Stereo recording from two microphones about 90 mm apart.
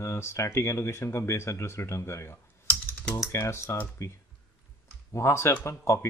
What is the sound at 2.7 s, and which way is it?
Computer keyboard, 20° left (ahead or behind).